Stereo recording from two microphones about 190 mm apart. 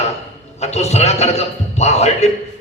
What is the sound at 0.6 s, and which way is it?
A man's voice, 35° left (ahead or behind).